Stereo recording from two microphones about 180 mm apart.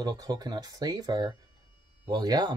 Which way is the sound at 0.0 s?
20° right (ahead or behind).